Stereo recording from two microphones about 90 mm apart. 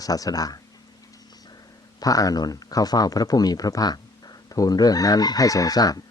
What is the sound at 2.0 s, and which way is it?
Speech, 40° left (ahead or behind).